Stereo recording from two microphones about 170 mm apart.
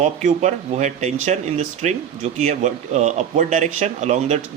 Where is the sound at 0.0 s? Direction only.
45° right (ahead or behind).